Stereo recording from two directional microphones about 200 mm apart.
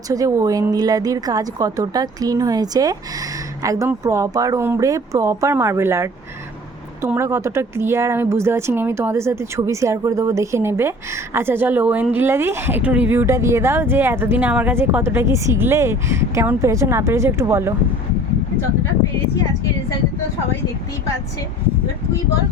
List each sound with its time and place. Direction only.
0.1 s a woman's voice: 15° right (ahead or behind)